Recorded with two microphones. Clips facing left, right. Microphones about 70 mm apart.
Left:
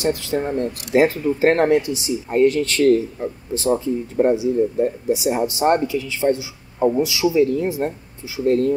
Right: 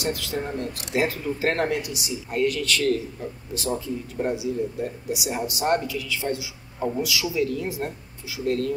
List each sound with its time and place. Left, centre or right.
0.0 s speech: left